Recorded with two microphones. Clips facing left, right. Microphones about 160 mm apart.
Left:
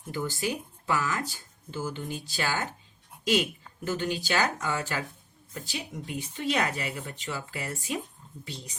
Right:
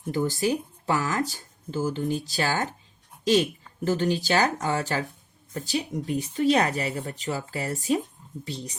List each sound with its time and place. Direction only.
0.1 s speech: 40° right (ahead or behind)